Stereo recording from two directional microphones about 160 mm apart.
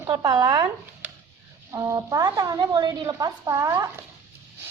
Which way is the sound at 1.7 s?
20° right (ahead or behind).